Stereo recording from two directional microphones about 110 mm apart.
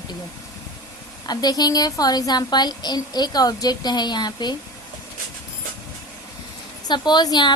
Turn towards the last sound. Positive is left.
turn(degrees=40)  # may be behind; listen again after turning